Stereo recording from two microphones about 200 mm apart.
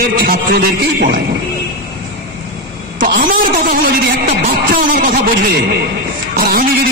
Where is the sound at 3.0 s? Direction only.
45° right (ahead or behind).